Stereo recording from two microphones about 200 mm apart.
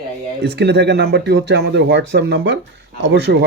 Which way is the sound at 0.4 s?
55° right (ahead or behind).